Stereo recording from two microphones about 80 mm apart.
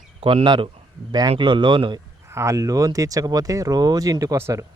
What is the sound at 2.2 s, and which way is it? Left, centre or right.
Speech, right.